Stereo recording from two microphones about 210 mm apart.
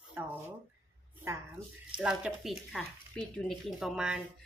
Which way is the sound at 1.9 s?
5° right (ahead or behind).